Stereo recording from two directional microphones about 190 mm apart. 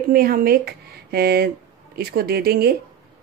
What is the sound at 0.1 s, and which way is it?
Speech, 50° right (ahead or behind).